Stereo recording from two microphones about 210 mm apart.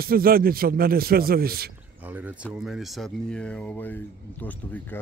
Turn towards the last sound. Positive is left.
turn(degrees=5)  # may be behind; listen again after turning